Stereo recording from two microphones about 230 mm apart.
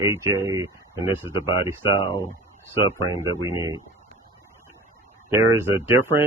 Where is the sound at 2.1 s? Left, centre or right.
Centre.